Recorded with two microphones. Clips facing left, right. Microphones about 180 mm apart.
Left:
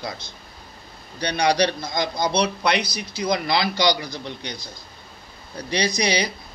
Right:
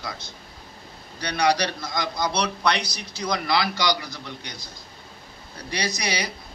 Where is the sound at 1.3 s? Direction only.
30° left (ahead or behind).